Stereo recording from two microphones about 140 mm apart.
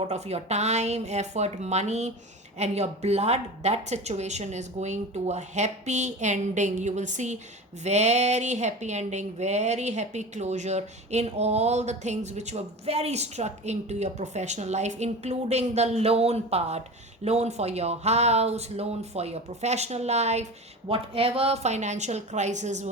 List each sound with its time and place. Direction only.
0.1 s a woman's voice: 50° right (ahead or behind)